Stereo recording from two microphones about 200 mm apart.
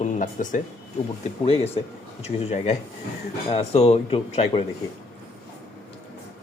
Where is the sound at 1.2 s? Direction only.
30° left (ahead or behind).